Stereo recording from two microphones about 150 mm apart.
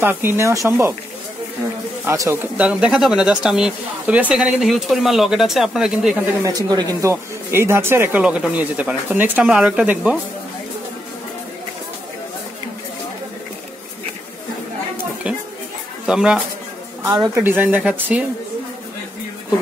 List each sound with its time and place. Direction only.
0.0 s speech: 15° right (ahead or behind)
2.0 s speech: 15° right (ahead or behind)
6.4 s speech: 25° right (ahead or behind); by 10.1 s 10° right (ahead or behind)
15.2 s a sound: 10° right (ahead or behind)
16.1 s speech: 5° right (ahead or behind)